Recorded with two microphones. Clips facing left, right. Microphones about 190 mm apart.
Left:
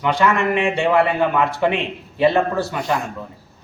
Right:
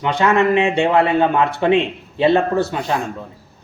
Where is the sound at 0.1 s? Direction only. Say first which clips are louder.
Right 3 dB; 25° right (ahead or behind).